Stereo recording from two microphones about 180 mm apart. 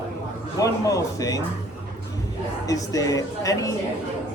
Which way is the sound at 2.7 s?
20° left (ahead or behind).